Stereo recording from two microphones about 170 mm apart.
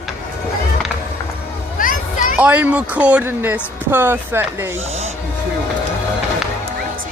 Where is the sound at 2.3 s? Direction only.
10° right (ahead or behind).